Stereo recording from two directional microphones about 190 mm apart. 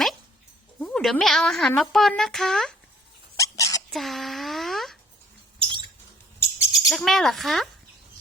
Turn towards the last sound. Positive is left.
turn(degrees=0)  # may be behind; listen again after turning